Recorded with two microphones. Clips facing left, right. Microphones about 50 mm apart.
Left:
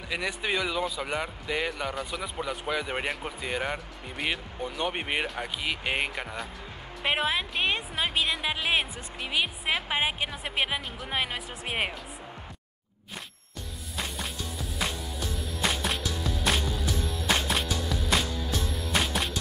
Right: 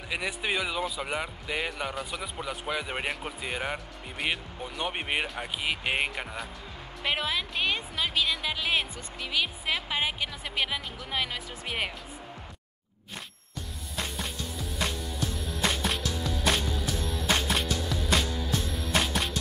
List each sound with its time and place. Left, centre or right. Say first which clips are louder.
0.1 s speech: left 1 dB; centre
7.1 s a woman's voice: left 2 dB; left
9.3 s a woman's voice: left 1 dB; left
13.9 s music: even; centre